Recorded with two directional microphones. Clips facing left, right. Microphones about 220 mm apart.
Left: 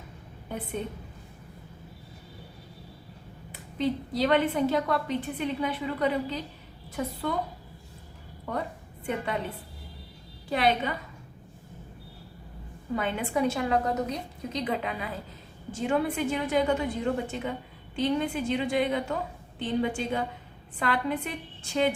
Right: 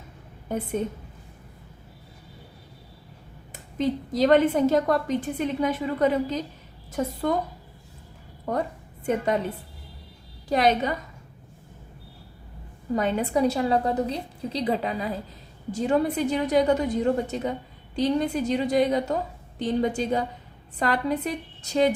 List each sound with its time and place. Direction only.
0.4 s a woman's voice: 45° right (ahead or behind)
3.5 s a woman's voice: 45° right (ahead or behind)
8.5 s a woman's voice: 45° right (ahead or behind)
10.5 s a woman's voice: 40° right (ahead or behind)
13.0 s a woman's voice: 40° right (ahead or behind)